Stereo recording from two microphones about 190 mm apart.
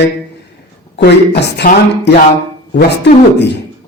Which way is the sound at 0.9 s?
60° left (ahead or behind).